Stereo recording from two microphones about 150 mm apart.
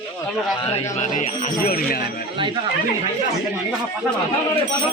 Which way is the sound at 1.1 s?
60° left (ahead or behind).